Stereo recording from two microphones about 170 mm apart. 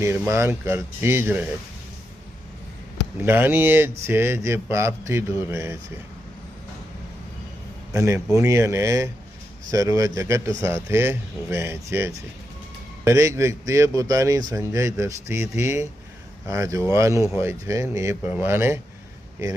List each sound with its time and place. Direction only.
0.0 s a man's voice: 15° right (ahead or behind)
3.2 s a man's voice: 15° right (ahead or behind)
7.9 s a man's voice: 15° right (ahead or behind)